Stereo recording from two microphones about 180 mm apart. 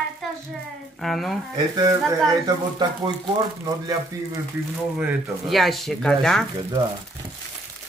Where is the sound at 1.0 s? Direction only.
Centre (ahead or behind).